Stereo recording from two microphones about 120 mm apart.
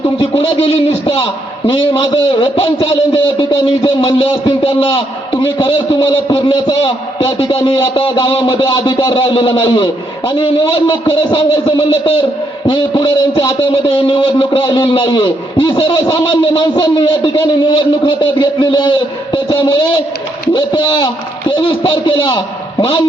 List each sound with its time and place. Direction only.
0.2 s a man's voice: 50° left (ahead or behind)